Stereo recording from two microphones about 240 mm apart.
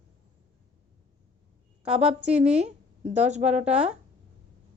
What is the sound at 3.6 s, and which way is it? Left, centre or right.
Speech, centre.